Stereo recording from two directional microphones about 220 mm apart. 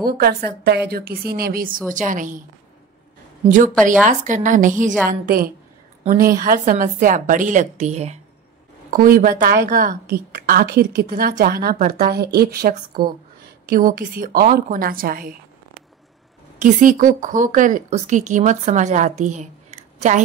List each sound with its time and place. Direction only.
0.0 s a woman's voice: 45° right (ahead or behind)
3.4 s a woman's voice: 35° right (ahead or behind)
6.0 s a woman's voice: 40° right (ahead or behind)
16.5 s a woman's voice: 35° right (ahead or behind)